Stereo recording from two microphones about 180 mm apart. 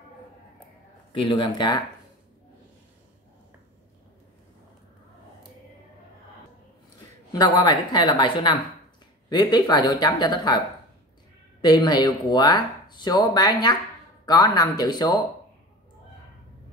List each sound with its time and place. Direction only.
1.1 s speech: 30° left (ahead or behind)
7.3 s speech: 25° left (ahead or behind)
11.6 s speech: 20° left (ahead or behind)